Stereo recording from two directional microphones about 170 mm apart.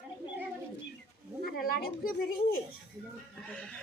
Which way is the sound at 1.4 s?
60° left (ahead or behind).